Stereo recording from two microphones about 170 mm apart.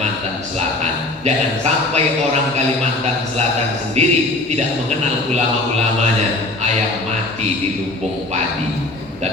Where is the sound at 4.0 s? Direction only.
40° right (ahead or behind).